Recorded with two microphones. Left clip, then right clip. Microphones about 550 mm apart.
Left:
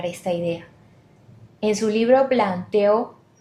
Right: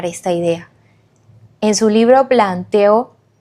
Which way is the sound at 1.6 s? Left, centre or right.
Right.